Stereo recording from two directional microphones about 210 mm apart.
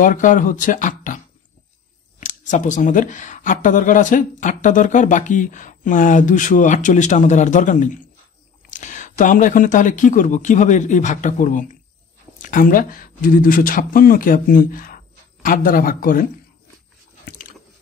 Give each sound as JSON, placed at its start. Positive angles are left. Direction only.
{"t": 0.0, "sound": "speech", "side_deg": 40}
{"t": 17.2, "sound": "biting", "side_deg": 40}